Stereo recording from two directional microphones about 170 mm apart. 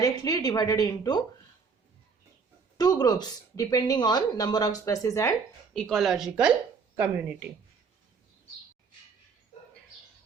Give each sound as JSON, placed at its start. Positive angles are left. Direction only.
{"t": 0.0, "sound": "a woman's voice", "side_deg": 20}
{"t": 2.7, "sound": "a woman's voice", "side_deg": 25}
{"t": 5.7, "sound": "speech", "side_deg": 5}